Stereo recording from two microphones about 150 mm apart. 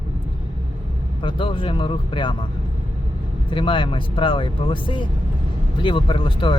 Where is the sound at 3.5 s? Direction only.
35° left (ahead or behind).